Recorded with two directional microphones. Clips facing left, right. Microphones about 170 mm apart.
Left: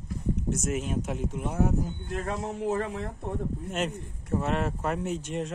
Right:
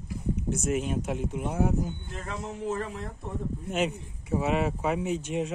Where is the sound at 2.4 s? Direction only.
70° left (ahead or behind).